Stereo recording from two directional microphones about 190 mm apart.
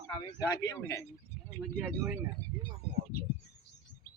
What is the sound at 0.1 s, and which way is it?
Speech, 20° left (ahead or behind).